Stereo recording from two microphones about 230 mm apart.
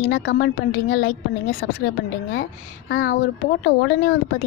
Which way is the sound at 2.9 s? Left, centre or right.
Left.